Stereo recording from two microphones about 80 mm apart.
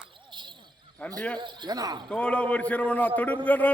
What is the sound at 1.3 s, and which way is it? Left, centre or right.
Speech, right.